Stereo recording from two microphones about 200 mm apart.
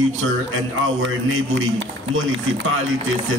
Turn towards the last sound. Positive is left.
turn(degrees=-75)  # may be behind; listen again after turning